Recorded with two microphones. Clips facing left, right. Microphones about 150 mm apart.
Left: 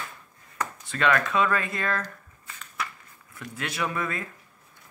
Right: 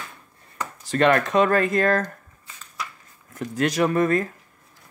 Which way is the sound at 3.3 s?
40° right (ahead or behind).